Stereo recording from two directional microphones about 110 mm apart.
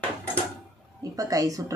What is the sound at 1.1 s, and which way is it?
Speech, 30° right (ahead or behind).